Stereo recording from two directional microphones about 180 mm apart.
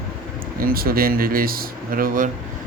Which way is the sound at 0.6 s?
55° right (ahead or behind).